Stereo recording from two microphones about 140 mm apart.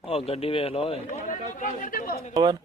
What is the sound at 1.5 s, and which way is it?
Speech, 70° left (ahead or behind).